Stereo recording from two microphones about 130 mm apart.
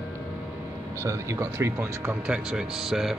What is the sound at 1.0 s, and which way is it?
Speech, 25° right (ahead or behind).